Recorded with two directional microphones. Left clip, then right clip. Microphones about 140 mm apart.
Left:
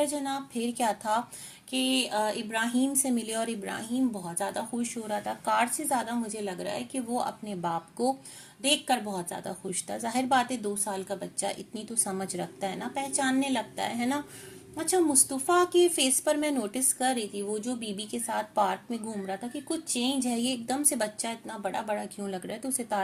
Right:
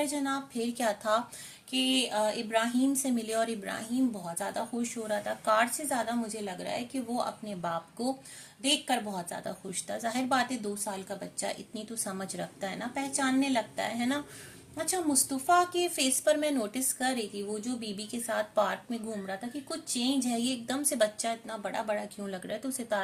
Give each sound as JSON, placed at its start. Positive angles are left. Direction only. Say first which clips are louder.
{"t": 0.0, "sound": "speech", "louder": "left 2 dB", "side_deg": 20}